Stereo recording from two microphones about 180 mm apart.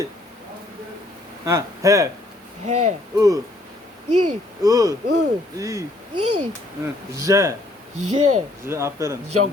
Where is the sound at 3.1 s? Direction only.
20° right (ahead or behind).